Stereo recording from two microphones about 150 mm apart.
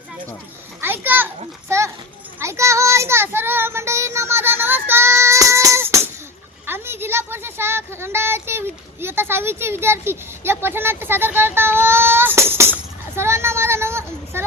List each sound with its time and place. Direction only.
0.8 s children playing: 15° right (ahead or behind)
2.4 s child singing: 20° right (ahead or behind)
6.7 s a sound: 15° right (ahead or behind)
13.1 s child singing: 15° right (ahead or behind)